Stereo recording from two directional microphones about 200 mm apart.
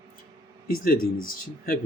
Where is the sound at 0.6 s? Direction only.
45° left (ahead or behind).